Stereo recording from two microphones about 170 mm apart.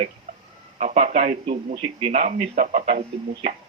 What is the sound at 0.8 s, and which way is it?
Speech, 50° right (ahead or behind).